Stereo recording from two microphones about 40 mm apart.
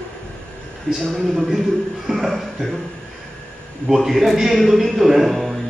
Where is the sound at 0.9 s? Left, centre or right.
Centre.